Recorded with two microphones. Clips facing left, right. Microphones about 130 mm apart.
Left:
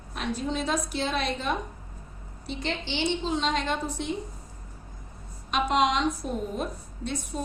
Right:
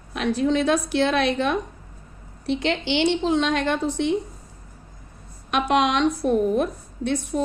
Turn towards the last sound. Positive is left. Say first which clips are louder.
# right 8 dB
turn(degrees=-65)  # may be behind; listen again after turning